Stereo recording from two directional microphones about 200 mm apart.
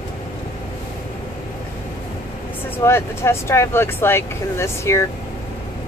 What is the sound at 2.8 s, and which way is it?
Speech, 15° left (ahead or behind).